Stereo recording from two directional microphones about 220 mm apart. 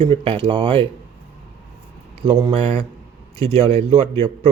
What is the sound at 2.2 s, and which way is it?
Speech, 20° right (ahead or behind).